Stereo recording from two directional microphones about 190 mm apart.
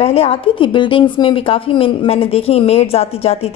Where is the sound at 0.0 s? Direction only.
30° left (ahead or behind).